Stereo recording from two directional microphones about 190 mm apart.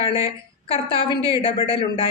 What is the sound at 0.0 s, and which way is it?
A woman's voice, 30° left (ahead or behind).